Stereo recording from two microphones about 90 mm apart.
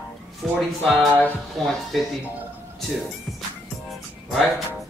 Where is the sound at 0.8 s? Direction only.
20° left (ahead or behind).